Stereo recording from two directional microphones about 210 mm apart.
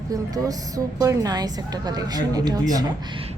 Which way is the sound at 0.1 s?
15° right (ahead or behind).